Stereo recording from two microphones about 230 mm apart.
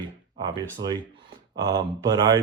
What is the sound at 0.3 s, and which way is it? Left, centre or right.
Speech, centre.